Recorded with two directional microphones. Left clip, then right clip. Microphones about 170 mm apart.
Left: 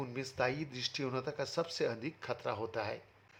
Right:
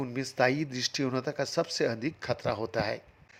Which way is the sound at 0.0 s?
35° right (ahead or behind).